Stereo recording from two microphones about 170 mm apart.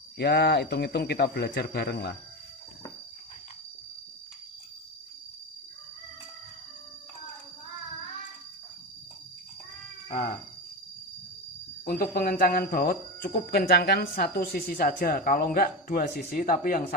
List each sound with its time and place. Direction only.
0.2 s a man's voice: 75° left (ahead or behind)
11.9 s speech: 60° left (ahead or behind)